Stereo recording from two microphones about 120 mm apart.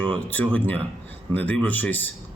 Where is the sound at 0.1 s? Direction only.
15° left (ahead or behind).